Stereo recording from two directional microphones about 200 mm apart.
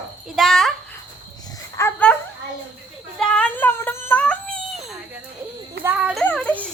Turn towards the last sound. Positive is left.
turn(degrees=5)  # may be behind; listen again after turning